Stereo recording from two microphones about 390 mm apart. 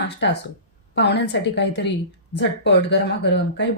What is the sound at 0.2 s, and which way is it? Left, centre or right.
Speech, left.